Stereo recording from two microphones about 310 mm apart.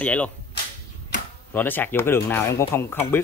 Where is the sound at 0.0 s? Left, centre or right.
Centre.